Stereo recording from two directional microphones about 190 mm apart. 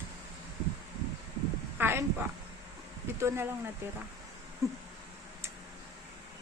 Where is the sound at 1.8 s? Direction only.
10° right (ahead or behind).